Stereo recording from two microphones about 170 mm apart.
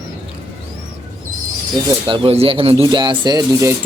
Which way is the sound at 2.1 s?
35° right (ahead or behind).